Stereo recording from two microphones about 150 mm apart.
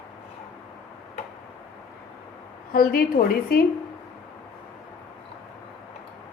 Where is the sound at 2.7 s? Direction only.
80° left.